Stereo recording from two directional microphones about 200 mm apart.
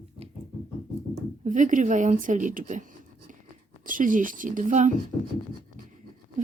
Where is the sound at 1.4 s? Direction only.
40° right (ahead or behind).